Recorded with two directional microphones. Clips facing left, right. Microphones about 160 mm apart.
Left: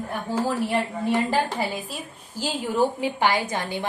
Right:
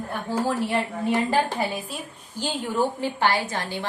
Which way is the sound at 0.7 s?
Centre (ahead or behind).